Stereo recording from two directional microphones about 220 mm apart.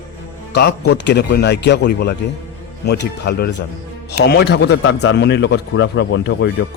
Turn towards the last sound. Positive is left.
turn(degrees=55)  # may be behind; listen again after turning